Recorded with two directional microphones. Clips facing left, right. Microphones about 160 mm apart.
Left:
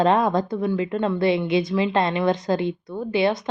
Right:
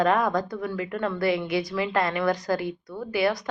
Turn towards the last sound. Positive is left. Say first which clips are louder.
# left 3 dB
turn(degrees=25)  # may be behind; listen again after turning